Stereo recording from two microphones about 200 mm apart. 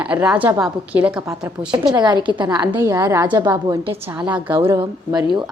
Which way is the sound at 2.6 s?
10° right (ahead or behind).